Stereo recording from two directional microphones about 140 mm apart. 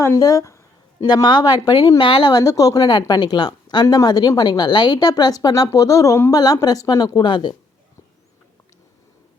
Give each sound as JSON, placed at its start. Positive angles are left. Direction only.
{"t": 0.0, "sound": "a woman's voice", "side_deg": 25}